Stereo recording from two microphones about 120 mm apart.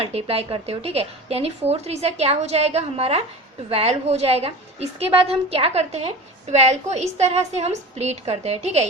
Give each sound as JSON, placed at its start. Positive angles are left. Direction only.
{"t": 0.0, "sound": "a woman's voice", "side_deg": -55}